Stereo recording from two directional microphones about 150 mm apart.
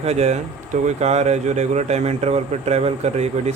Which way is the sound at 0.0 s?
45° right (ahead or behind).